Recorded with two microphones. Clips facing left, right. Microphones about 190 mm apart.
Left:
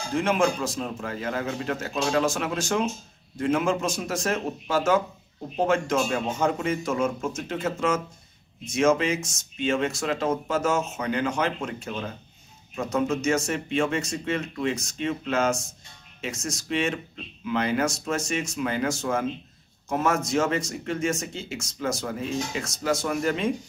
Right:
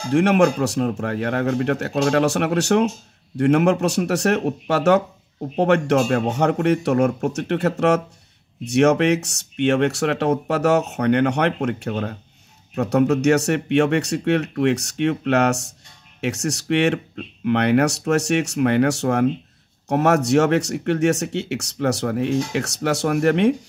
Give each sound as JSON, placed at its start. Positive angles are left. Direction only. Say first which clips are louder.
{"t": 0.1, "sound": "speech", "louder": "right 7 dB", "side_deg": -70}